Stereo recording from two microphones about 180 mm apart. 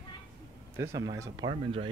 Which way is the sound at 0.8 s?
15° right (ahead or behind).